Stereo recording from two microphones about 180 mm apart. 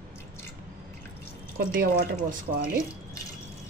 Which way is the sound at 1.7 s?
60° right (ahead or behind).